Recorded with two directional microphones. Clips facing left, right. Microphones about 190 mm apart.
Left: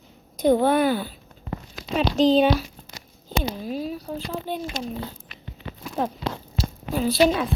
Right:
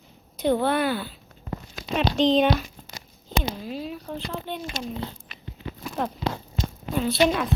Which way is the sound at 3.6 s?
40° left (ahead or behind).